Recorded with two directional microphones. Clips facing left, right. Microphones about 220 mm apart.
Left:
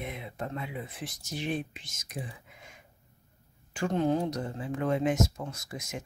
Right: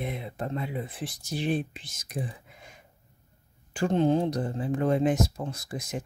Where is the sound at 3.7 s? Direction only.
30° right (ahead or behind).